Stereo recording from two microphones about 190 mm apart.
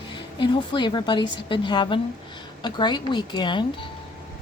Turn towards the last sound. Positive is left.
turn(degrees=25)  # may be behind; listen again after turning